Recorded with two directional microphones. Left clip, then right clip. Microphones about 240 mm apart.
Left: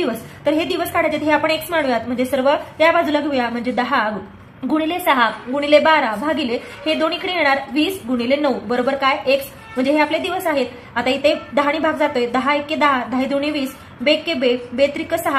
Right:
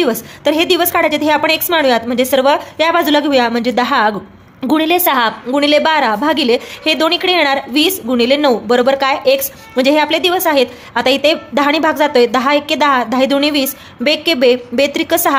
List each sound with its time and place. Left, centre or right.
0.0 s a woman's voice: right